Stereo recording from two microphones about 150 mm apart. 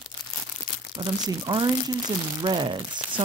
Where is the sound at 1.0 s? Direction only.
30° right (ahead or behind).